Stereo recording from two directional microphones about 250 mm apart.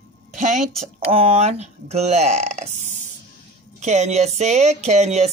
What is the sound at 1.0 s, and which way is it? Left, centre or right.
Music, right.